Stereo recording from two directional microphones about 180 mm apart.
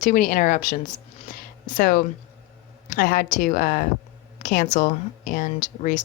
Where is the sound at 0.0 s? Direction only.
45° left (ahead or behind).